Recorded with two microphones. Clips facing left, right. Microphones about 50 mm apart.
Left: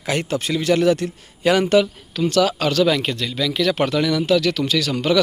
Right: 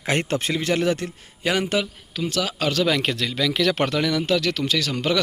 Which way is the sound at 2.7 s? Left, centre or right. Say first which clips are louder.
Left 2 dB; right.